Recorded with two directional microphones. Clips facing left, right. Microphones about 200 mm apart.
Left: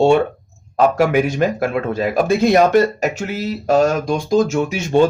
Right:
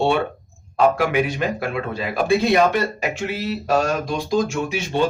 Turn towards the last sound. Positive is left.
turn(degrees=45)  # may be behind; listen again after turning